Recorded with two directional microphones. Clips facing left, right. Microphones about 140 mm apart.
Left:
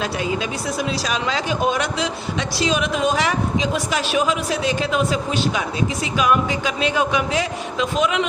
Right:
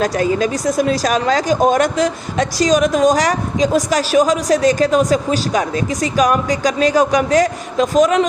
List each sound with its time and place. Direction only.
0.3 s speech: 40° right (ahead or behind)